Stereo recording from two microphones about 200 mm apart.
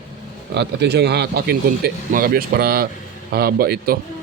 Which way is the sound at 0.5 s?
60° right (ahead or behind).